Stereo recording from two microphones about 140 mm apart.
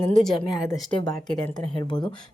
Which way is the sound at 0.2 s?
Centre (ahead or behind).